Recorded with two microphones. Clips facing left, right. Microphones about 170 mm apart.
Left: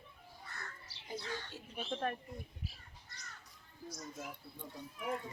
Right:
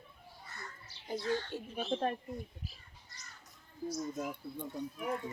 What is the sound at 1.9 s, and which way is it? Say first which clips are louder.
Speech: right 4 dB; 25° right (ahead or behind).